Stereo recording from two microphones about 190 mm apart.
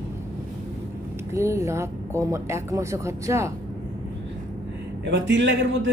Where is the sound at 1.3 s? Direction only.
15° right (ahead or behind).